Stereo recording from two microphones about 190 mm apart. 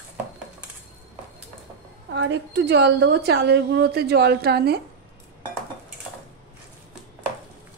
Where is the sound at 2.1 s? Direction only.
65° right (ahead or behind).